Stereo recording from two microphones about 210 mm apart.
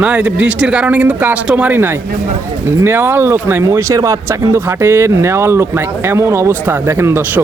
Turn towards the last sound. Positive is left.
turn(degrees=-10)  # may be behind; listen again after turning